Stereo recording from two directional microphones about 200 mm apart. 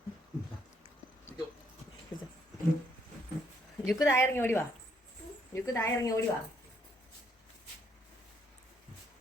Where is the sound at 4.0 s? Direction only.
15° left (ahead or behind).